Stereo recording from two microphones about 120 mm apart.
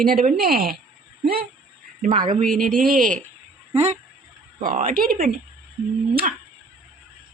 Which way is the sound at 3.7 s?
65° right (ahead or behind).